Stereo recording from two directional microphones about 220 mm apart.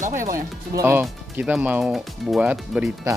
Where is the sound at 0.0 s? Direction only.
35° right (ahead or behind).